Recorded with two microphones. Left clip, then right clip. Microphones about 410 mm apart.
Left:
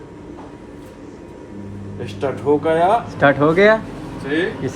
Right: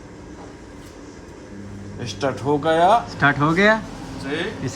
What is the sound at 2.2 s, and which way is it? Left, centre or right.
Speech, right.